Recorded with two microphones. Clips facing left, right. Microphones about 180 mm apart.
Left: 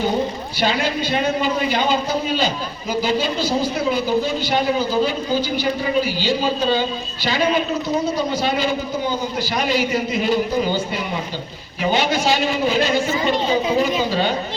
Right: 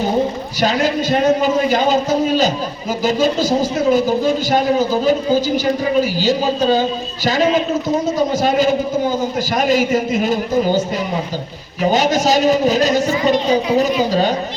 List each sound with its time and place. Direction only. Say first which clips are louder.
0.6 s a man's voice: right 4 dB; 45° right (ahead or behind)